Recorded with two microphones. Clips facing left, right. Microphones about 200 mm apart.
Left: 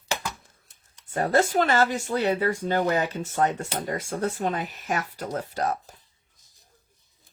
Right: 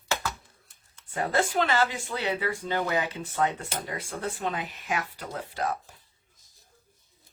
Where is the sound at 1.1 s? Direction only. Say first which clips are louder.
Left 4 dB; 40° left (ahead or behind).